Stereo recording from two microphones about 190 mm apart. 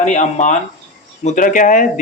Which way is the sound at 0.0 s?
40° left (ahead or behind).